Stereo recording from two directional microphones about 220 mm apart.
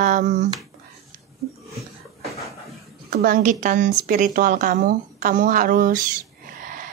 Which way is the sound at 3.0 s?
40° right (ahead or behind).